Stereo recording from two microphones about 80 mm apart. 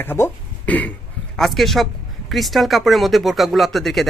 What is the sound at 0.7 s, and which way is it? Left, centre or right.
Speech, centre.